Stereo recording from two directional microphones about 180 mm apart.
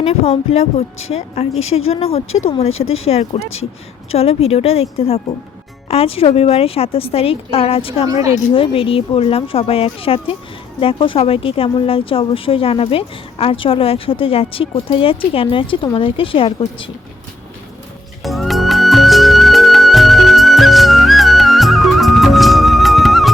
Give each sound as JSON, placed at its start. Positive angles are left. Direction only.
{"t": 0.0, "sound": "a woman's voice", "side_deg": 35}
{"t": 18.2, "sound": "music", "side_deg": 0}